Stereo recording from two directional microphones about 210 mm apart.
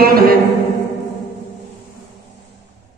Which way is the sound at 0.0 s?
45° right (ahead or behind).